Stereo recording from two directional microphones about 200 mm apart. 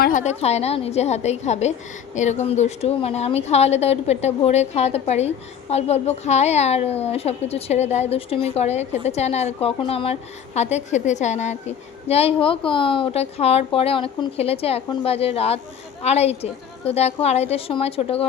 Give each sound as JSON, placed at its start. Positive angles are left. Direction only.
{"t": 0.0, "sound": "a woman's voice", "side_deg": 40}